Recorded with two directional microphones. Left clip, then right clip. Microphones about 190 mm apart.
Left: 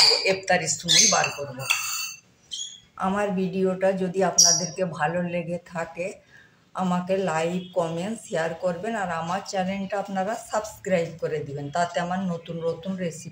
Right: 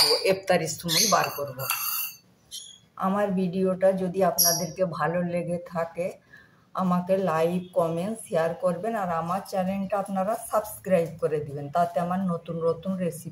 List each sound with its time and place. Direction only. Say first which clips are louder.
0.2 s speech: left 1 dB; 25° right (ahead or behind)
3.0 s a woman's voice: left 1 dB; 5° right (ahead or behind)